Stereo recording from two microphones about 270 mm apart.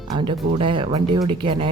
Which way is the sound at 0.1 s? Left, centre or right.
Centre.